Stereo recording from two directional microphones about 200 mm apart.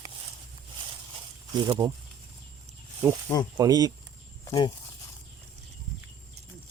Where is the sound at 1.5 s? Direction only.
25° right (ahead or behind).